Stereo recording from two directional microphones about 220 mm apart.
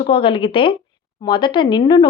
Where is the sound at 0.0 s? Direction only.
25° left (ahead or behind).